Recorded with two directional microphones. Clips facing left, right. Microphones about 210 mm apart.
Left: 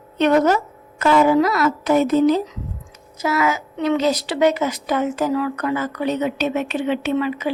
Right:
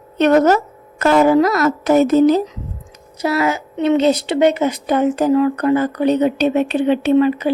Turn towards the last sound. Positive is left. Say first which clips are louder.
# right 7 dB
turn(degrees=-35)  # may be behind; listen again after turning